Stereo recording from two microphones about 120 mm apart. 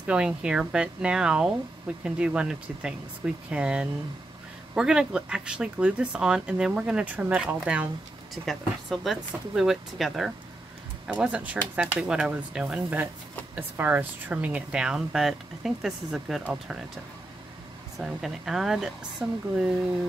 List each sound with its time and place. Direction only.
0.0 s speech: 10° right (ahead or behind)
9.0 s speech: centre (ahead or behind)
17.9 s speech: centre (ahead or behind)